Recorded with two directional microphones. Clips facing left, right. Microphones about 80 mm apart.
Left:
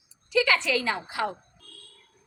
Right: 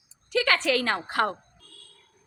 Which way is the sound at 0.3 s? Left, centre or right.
Right.